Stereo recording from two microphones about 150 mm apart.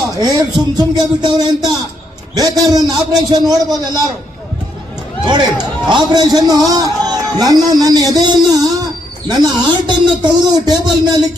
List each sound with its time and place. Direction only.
0.1 s speech: 25° right (ahead or behind)
5.9 s a man's voice: 30° right (ahead or behind)